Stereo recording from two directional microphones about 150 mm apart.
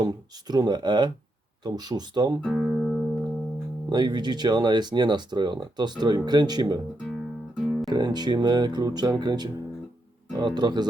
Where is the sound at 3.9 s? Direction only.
30° right (ahead or behind).